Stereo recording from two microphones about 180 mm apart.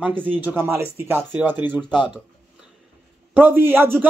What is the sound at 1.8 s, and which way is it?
Speech, 25° left (ahead or behind).